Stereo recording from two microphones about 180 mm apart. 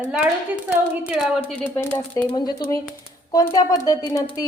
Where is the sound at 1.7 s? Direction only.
10° left (ahead or behind).